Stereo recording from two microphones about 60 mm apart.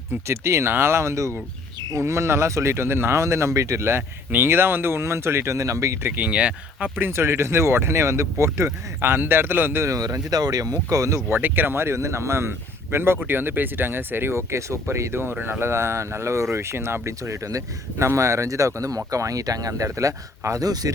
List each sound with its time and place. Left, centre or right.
0.1 s speech: right
6.0 s speech: right
6.9 s speech: right
9.0 s a man's voice: right
9.8 s speech: right
11.3 s speech: right